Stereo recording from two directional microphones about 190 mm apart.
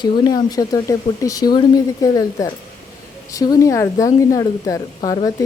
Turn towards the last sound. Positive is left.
turn(degrees=20)  # may be behind; listen again after turning